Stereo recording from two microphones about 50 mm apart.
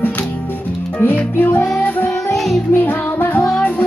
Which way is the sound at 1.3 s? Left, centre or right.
Left.